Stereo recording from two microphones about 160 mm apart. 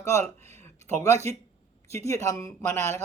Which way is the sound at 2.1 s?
20° left (ahead or behind).